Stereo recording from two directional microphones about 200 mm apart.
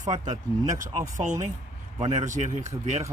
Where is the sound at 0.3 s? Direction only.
40° right (ahead or behind).